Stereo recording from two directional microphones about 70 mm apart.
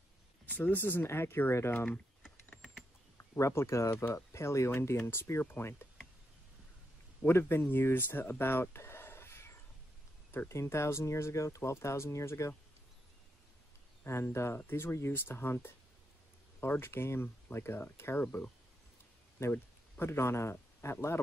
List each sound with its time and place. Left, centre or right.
0.5 s speech: left
3.2 s speech: left
7.2 s speech: left
10.5 s speech: left
14.0 s speech: left
18.2 s speech: left
19.5 s speech: left